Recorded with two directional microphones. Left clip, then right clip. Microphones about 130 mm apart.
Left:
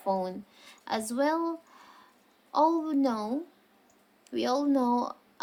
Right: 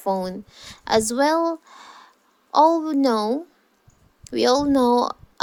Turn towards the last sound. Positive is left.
turn(degrees=-80)